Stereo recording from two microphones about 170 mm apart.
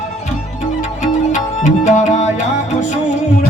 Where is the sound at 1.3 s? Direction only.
45° left (ahead or behind).